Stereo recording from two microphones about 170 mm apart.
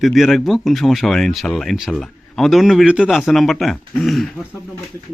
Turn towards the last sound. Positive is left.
turn(degrees=0)  # may be behind; listen again after turning